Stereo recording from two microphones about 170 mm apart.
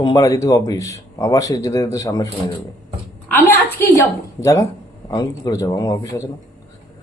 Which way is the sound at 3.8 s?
15° left (ahead or behind).